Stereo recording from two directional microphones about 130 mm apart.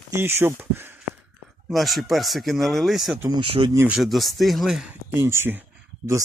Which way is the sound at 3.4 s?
45° right (ahead or behind).